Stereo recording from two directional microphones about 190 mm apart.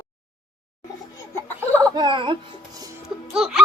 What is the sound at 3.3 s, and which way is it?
Music, centre (ahead or behind).